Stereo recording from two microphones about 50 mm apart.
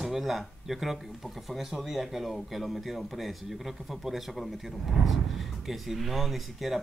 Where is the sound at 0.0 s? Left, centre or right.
Centre.